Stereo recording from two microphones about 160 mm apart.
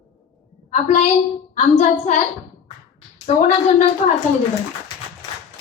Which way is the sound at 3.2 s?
45° left (ahead or behind).